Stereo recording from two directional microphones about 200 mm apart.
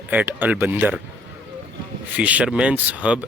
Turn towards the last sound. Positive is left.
turn(degrees=-5)  # may be behind; listen again after turning